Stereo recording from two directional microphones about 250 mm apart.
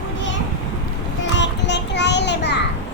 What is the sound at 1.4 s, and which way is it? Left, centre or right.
Child singing, left.